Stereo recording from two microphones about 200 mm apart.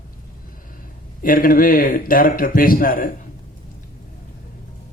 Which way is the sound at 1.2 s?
45° left (ahead or behind).